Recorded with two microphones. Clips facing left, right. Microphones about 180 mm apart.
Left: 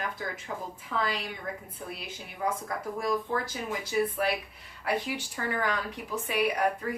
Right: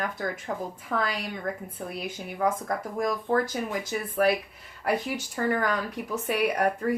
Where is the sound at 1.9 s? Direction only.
50° right (ahead or behind).